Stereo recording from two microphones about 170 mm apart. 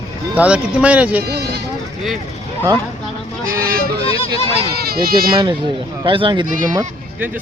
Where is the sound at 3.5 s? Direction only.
60° right (ahead or behind).